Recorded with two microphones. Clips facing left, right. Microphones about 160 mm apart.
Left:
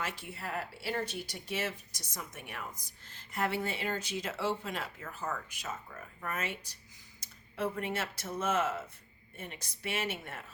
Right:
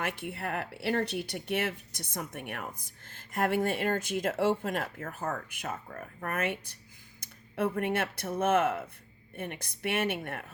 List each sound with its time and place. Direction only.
0.0 s speech: 60° right (ahead or behind)